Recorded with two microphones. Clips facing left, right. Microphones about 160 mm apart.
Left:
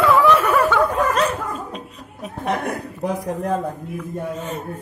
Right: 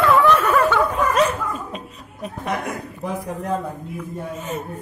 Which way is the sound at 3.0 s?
40° left (ahead or behind).